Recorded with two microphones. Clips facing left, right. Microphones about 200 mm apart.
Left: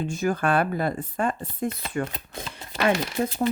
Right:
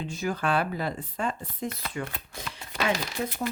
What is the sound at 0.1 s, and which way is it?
Speech, 50° left (ahead or behind).